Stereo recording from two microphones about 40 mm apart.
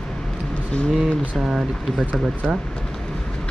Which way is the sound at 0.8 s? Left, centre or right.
Centre.